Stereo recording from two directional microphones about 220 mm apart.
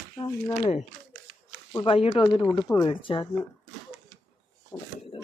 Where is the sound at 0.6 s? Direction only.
25° left (ahead or behind).